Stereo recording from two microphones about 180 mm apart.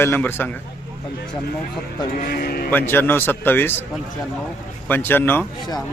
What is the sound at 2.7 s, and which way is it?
A man's voice, 10° left (ahead or behind).